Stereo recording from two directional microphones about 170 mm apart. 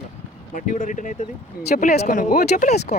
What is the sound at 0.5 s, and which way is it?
Speech, 50° left (ahead or behind).